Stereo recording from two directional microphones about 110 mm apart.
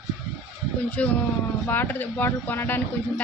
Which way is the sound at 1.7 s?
15° left (ahead or behind).